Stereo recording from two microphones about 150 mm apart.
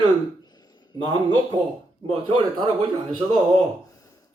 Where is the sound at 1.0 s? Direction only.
30° right (ahead or behind).